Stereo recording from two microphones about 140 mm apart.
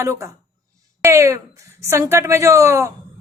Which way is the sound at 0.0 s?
20° right (ahead or behind).